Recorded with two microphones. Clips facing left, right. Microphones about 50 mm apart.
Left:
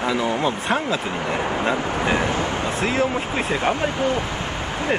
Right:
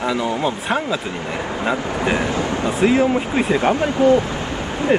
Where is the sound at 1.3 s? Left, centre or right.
Left.